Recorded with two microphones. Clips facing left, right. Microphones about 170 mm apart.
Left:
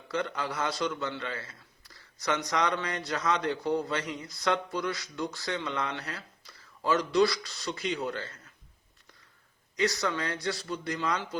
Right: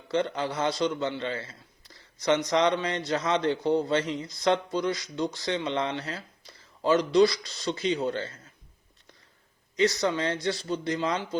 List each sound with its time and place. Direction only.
0.1 s a man's voice: 25° right (ahead or behind)
9.7 s a man's voice: 20° right (ahead or behind)